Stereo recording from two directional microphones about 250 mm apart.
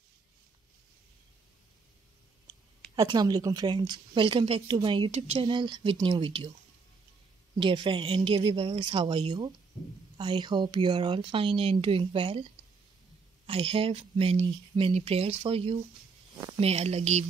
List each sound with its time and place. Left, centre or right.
3.0 s speech: centre
7.5 s speech: centre
13.5 s speech: right